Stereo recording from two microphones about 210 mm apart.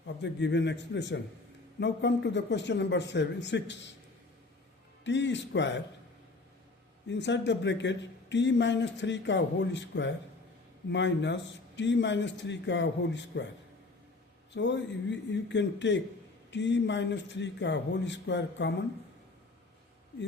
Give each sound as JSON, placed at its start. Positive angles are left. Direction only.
{"t": 0.0, "sound": "speech", "side_deg": 55}
{"t": 5.0, "sound": "speech", "side_deg": 60}
{"t": 7.1, "sound": "speech", "side_deg": 55}
{"t": 14.5, "sound": "speech", "side_deg": 55}